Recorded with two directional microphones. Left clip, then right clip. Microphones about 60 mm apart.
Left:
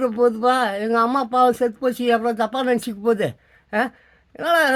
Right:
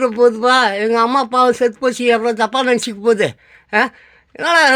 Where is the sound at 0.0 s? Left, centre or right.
Left.